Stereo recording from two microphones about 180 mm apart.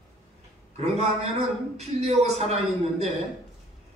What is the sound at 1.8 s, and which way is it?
Speech, 35° right (ahead or behind).